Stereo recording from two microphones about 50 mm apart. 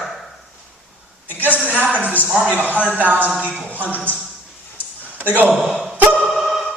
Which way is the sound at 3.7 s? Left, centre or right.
Left.